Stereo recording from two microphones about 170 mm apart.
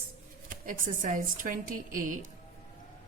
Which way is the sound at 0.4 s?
55° right (ahead or behind).